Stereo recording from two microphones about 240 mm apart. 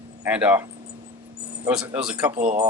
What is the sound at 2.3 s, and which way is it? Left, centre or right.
Speech, right.